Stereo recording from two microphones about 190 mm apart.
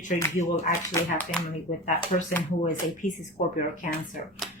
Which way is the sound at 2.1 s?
40° left (ahead or behind).